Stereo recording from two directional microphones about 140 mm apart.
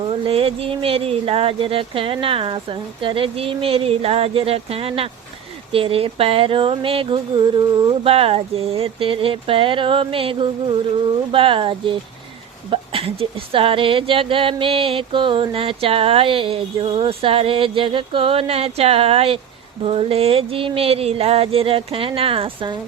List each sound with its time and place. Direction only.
0.3 s speech: 45° right (ahead or behind)
8.1 s speech: 45° right (ahead or behind)